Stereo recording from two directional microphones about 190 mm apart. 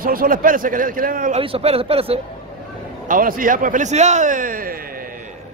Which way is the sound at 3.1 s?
45° right (ahead or behind).